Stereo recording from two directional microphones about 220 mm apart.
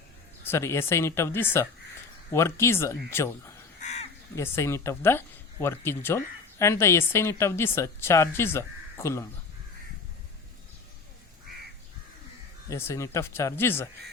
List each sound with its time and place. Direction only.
0.4 s speech: 10° left (ahead or behind)
3.8 s crow: 30° left (ahead or behind)
4.4 s speech: 10° left (ahead or behind)
12.7 s speech: 15° left (ahead or behind)